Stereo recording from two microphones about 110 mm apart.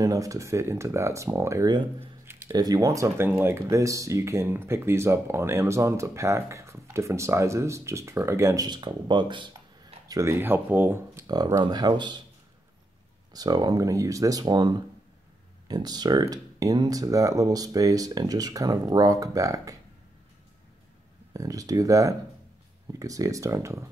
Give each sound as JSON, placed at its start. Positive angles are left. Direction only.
{"t": 0.0, "sound": "speech", "side_deg": -30}
{"t": 2.0, "sound": "a sound", "side_deg": -20}
{"t": 2.5, "sound": "speech", "side_deg": -35}
{"t": 8.6, "sound": "speech", "side_deg": -40}
{"t": 10.1, "sound": "speech", "side_deg": -20}
{"t": 11.2, "sound": "speech", "side_deg": -35}
{"t": 13.3, "sound": "speech", "side_deg": -35}
{"t": 21.3, "sound": "speech", "side_deg": -30}